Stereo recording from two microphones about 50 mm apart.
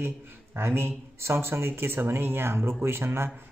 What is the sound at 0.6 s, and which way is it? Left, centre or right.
A man's voice, right.